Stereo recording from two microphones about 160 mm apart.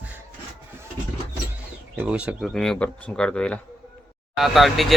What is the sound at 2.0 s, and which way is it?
Speech, 10° right (ahead or behind).